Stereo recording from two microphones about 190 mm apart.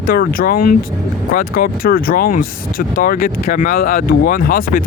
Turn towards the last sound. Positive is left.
turn(degrees=50)  # may be behind; listen again after turning